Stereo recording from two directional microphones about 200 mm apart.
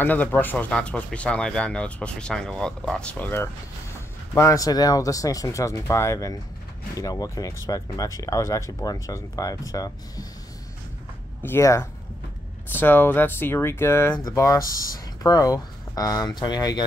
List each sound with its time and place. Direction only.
0.0 s speech: 10° left (ahead or behind)
11.4 s speech: 15° left (ahead or behind)